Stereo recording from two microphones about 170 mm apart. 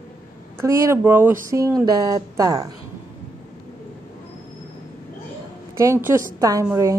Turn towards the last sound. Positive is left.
turn(degrees=-20)  # may be behind; listen again after turning